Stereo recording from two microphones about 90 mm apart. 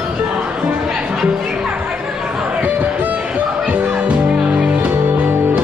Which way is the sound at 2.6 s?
20° right (ahead or behind).